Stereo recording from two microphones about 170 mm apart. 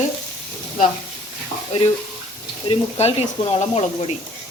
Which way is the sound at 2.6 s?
40° left (ahead or behind).